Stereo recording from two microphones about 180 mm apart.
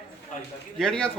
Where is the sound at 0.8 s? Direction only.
5° left (ahead or behind).